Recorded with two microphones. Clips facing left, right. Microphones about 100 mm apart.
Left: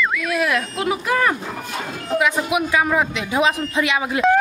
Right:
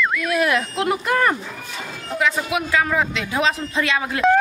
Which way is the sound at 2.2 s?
15° left (ahead or behind).